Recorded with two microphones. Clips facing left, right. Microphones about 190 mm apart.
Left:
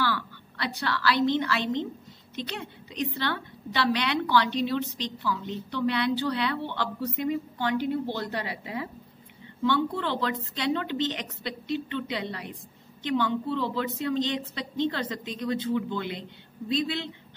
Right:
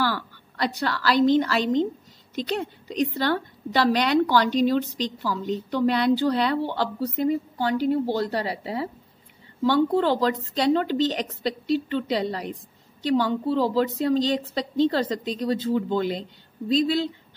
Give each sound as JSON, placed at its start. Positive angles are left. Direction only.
{"t": 0.0, "sound": "a woman's voice", "side_deg": -45}
{"t": 3.2, "sound": "a woman's voice", "side_deg": -40}